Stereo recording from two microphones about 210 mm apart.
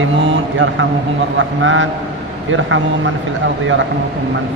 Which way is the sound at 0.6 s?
70° right (ahead or behind).